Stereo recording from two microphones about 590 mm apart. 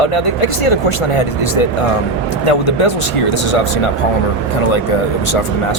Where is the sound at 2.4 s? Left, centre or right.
Left.